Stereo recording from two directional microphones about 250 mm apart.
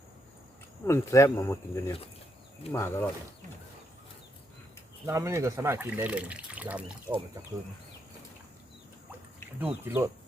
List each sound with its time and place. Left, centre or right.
0.9 s speech: centre
5.0 s speech: centre
9.6 s speech: centre